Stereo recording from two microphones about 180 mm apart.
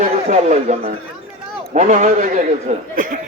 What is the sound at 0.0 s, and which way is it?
Speech, 40° right (ahead or behind).